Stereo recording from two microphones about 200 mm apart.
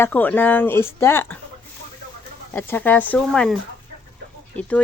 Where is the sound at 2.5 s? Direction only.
10° left (ahead or behind).